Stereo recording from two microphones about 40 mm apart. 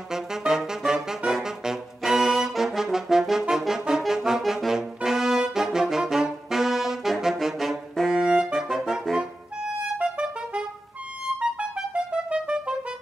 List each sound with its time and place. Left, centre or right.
0.1 s saxophone: centre
1.4 s brass instrument: centre
4.1 s saxophone: centre
4.5 s brass instrument: centre
6.5 s saxophone: centre
7.9 s saxophone: centre
9.9 s music: right
11.3 s clarinet: right